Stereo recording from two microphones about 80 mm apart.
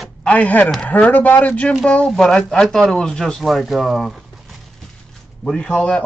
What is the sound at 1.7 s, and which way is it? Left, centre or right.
Speech, centre.